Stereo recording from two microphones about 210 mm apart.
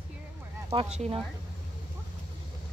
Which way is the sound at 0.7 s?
30° right (ahead or behind).